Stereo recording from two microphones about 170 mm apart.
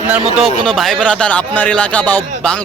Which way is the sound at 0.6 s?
Centre (ahead or behind).